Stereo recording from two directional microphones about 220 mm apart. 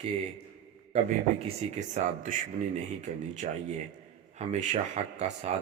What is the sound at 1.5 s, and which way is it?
Speech, 30° right (ahead or behind).